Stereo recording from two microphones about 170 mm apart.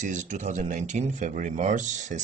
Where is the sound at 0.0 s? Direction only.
45° right (ahead or behind).